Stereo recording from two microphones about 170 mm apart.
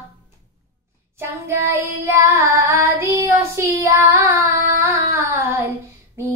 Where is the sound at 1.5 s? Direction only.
15° right (ahead or behind).